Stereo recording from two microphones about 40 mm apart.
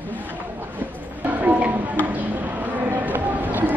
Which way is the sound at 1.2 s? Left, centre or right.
Right.